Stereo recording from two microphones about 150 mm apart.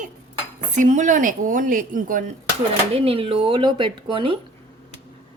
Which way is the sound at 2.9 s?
40° right (ahead or behind).